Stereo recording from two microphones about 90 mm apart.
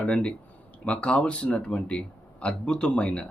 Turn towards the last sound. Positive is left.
turn(degrees=10)  # may be behind; listen again after turning